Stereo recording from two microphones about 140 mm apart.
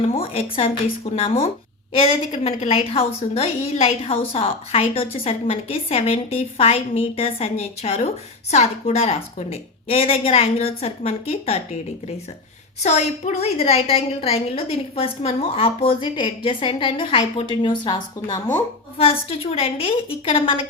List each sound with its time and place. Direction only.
0.1 s a woman's voice: 40° left (ahead or behind)
12.8 s a woman's voice: 55° left (ahead or behind); by 18.3 s 30° left (ahead or behind)
18.9 s a woman's voice: 45° left (ahead or behind)